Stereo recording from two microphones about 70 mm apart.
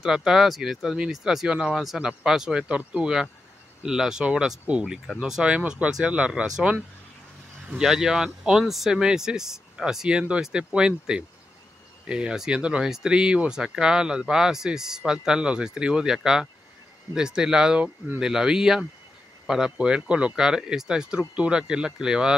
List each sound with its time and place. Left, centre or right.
0.0 s speech: centre
7.6 s speech: centre